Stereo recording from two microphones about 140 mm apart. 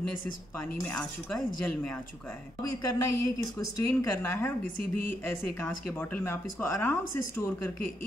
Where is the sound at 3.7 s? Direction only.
15° left (ahead or behind).